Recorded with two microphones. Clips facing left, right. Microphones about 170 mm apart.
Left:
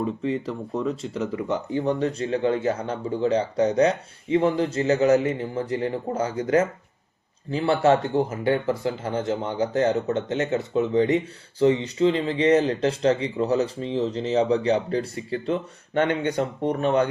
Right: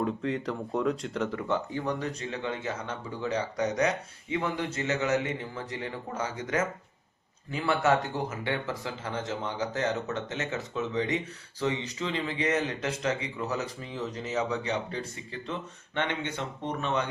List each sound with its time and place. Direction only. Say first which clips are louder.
0.0 s speech: left 4 dB; 5° left (ahead or behind)
1.4 s speech: left 5 dB; 20° left (ahead or behind); by 17.1 s 35° left (ahead or behind)